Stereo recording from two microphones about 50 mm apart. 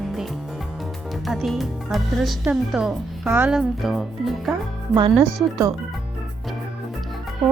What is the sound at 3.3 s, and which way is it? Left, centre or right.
Speech, right.